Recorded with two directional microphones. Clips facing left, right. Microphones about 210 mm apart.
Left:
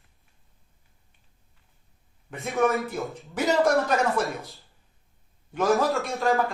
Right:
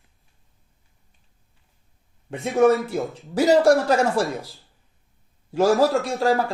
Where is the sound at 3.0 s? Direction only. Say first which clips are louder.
Right 4 dB; centre (ahead or behind).